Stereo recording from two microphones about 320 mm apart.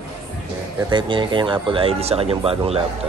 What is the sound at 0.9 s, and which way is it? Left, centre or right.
Speech, centre.